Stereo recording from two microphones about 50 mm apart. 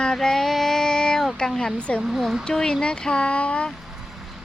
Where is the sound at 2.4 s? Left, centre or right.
Centre.